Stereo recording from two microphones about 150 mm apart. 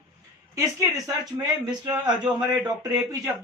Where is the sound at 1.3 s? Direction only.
25° right (ahead or behind).